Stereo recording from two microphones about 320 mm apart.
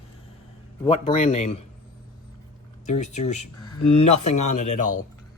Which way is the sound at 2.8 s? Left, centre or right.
Left.